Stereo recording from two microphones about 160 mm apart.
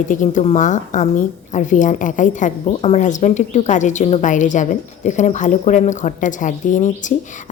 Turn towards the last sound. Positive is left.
turn(degrees=50)  # may be behind; listen again after turning